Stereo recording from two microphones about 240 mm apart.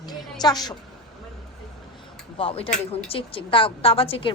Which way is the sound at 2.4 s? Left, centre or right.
Left.